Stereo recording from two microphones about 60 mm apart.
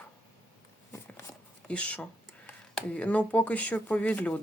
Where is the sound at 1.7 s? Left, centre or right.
Left.